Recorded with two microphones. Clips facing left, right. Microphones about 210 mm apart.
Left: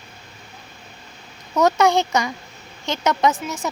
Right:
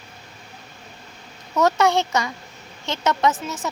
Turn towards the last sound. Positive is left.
turn(degrees=15)  # may be behind; listen again after turning